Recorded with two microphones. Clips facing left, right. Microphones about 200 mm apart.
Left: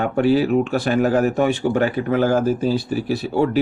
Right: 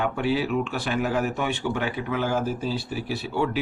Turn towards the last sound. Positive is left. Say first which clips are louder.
# left 7 dB
turn(degrees=40)  # may be behind; listen again after turning